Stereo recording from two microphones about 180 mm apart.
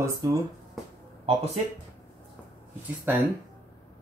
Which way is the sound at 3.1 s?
10° right (ahead or behind).